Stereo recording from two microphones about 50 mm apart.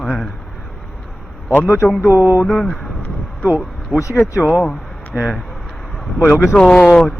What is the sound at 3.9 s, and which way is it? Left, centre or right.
Speech, left.